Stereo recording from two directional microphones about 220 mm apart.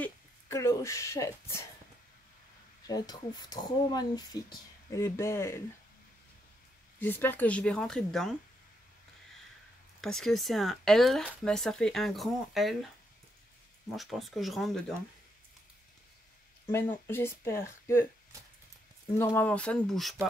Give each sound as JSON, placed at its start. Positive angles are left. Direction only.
{"t": 0.0, "sound": "speech", "side_deg": 15}
{"t": 2.9, "sound": "speech", "side_deg": 20}
{"t": 7.0, "sound": "speech", "side_deg": 10}
{"t": 10.0, "sound": "speech", "side_deg": 0}
{"t": 13.9, "sound": "speech", "side_deg": 0}
{"t": 16.7, "sound": "speech", "side_deg": 10}
{"t": 19.1, "sound": "speech", "side_deg": 10}